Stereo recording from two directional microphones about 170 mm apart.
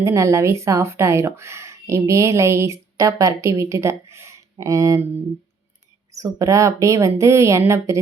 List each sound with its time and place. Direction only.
0.0 s speech: 15° right (ahead or behind)
6.1 s speech: 20° right (ahead or behind)